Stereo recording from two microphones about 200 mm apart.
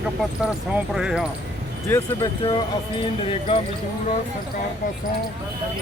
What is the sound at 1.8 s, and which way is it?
Speech, 15° left (ahead or behind).